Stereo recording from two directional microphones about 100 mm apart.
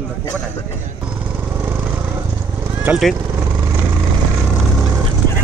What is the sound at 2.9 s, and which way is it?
Speech, 15° right (ahead or behind).